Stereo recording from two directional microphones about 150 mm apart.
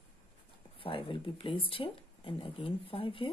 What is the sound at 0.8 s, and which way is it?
Speech, 35° left (ahead or behind).